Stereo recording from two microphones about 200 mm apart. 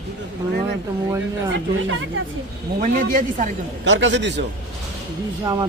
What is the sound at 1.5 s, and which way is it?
Speech, 70° right (ahead or behind).